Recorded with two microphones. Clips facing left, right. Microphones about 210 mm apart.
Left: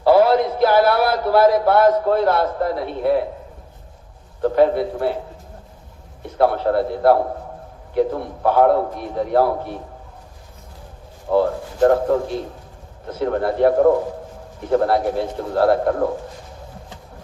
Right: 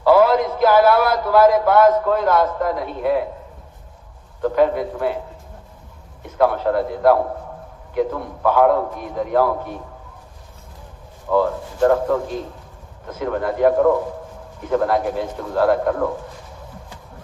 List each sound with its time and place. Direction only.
0.0 s a man's voice: 35° left (ahead or behind)
4.5 s a man's voice: 35° left (ahead or behind)
6.3 s a man's voice: 35° left (ahead or behind)
11.3 s a man's voice: 35° left (ahead or behind)
13.1 s a man's voice: 35° left (ahead or behind)